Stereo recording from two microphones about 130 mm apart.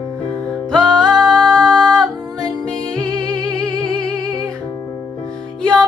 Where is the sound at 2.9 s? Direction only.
30° right (ahead or behind).